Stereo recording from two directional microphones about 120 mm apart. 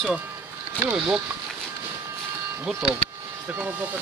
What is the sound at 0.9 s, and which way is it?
Speech, 10° right (ahead or behind).